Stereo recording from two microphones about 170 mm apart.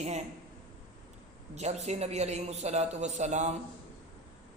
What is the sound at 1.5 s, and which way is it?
A man's voice, 40° right (ahead or behind).